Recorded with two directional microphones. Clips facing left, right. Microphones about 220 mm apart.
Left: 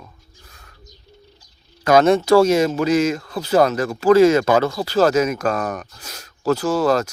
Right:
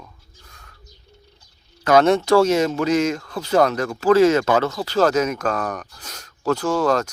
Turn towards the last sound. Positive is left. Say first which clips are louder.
# left 2 dB
turn(degrees=10)  # may be behind; listen again after turning